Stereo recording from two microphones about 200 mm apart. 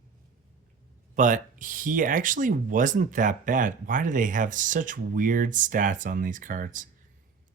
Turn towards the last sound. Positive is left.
turn(degrees=-40)  # may be behind; listen again after turning